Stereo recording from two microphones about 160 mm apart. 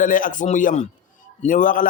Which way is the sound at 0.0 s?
55° left (ahead or behind).